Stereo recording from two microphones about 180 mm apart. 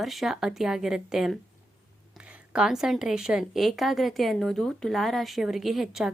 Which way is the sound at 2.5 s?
5° right (ahead or behind).